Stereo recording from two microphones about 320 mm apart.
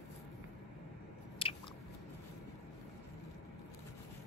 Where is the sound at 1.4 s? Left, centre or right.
Centre.